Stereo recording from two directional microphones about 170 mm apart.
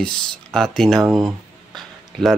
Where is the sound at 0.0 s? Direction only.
5° left (ahead or behind).